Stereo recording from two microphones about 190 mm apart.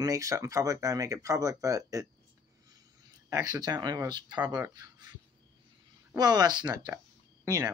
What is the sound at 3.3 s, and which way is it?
Speech, 20° right (ahead or behind).